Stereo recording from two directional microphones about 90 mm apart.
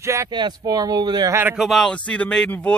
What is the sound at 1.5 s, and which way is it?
Speech, centre (ahead or behind).